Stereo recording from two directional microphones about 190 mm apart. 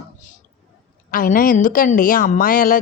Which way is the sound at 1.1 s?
45° left (ahead or behind).